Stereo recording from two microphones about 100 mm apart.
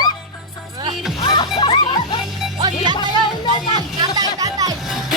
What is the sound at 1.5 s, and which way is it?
Music, 45° left (ahead or behind).